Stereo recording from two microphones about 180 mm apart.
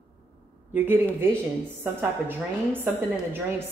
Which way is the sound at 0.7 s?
10° right (ahead or behind).